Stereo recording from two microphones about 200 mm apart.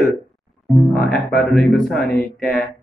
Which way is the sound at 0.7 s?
Centre (ahead or behind).